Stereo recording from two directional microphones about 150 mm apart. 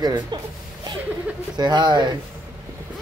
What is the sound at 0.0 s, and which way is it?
Speech, 30° right (ahead or behind).